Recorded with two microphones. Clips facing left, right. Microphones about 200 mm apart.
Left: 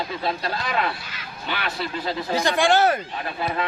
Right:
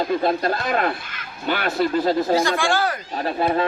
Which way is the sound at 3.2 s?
40° right (ahead or behind).